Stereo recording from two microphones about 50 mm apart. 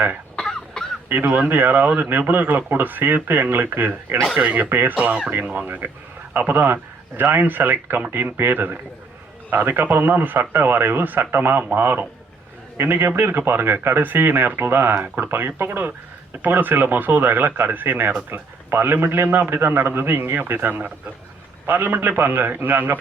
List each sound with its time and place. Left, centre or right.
0.3 s cough: centre
1.1 s speech: right
4.9 s speech: right